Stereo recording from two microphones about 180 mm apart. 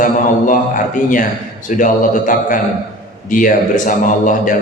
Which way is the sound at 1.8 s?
45° left (ahead or behind).